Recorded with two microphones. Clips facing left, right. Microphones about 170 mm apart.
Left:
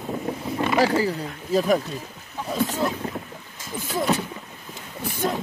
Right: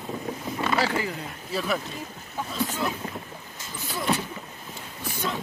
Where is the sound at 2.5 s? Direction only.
35° left (ahead or behind).